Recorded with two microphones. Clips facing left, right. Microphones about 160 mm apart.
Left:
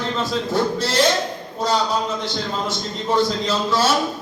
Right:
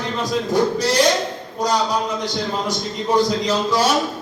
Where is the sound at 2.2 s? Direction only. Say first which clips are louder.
Right 2 dB; 15° right (ahead or behind).